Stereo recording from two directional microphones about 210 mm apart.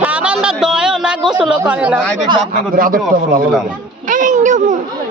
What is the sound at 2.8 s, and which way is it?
Speech, 40° right (ahead or behind).